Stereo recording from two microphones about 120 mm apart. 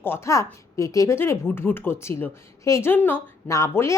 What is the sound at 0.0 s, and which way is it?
A woman's voice, 20° left (ahead or behind).